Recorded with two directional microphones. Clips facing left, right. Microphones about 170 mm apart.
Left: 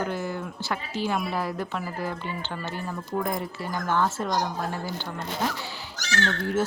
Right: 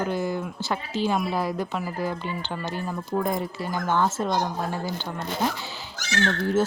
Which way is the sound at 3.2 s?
25° right (ahead or behind).